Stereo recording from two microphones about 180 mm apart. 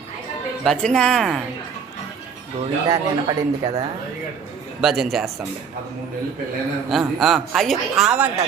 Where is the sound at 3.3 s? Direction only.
25° right (ahead or behind).